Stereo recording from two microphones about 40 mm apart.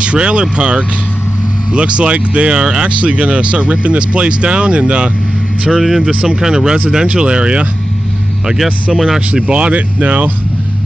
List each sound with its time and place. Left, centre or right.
0.0 s speech: right
5.7 s speech: centre; by 7.6 s right
8.9 s speech: centre
9.3 s speech: right